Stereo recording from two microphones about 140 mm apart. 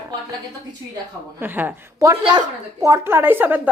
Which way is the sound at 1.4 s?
15° right (ahead or behind).